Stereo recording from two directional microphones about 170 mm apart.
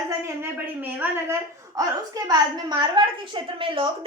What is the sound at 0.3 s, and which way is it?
A woman's voice, 15° right (ahead or behind).